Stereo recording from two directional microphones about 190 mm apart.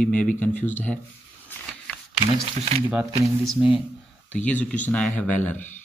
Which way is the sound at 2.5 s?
35° right (ahead or behind).